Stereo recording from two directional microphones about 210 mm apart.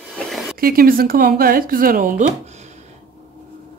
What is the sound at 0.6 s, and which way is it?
Speech, 45° right (ahead or behind).